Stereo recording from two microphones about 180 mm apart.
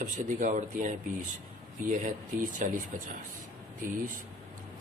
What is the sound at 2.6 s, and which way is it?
Speech, 45° right (ahead or behind).